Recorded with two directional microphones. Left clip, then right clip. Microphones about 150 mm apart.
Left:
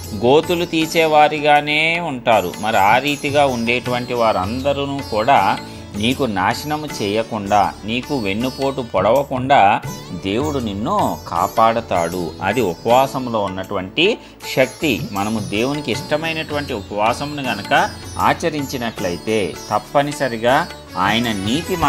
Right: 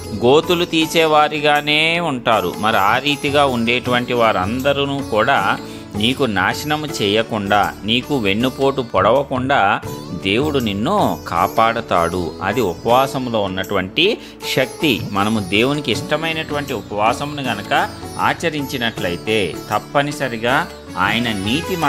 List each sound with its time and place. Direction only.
0.2 s speech: 20° right (ahead or behind)
10.2 s speech: 25° right (ahead or behind)
12.4 s speech: centre (ahead or behind)
13.1 s speech: 30° right (ahead or behind)
16.0 s speech: 10° right (ahead or behind)